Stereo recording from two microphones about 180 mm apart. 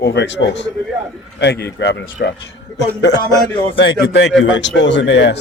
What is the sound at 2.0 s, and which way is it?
Speech, 65° left (ahead or behind).